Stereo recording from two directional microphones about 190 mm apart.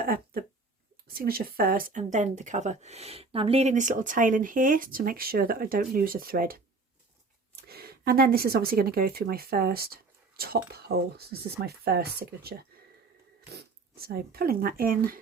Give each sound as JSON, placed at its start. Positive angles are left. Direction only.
{"t": 0.0, "sound": "a sound", "side_deg": -50}
{"t": 1.1, "sound": "speech", "side_deg": -50}
{"t": 7.7, "sound": "speech", "side_deg": -55}